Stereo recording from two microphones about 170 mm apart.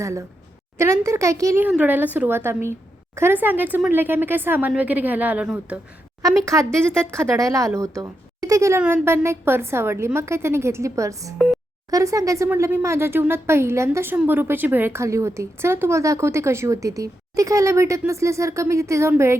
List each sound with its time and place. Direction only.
0.0 s speech: 15° right (ahead or behind)
6.4 s speech: 15° right (ahead or behind)
6.7 s speech: 5° left (ahead or behind)
7.1 s speech: 20° right (ahead or behind)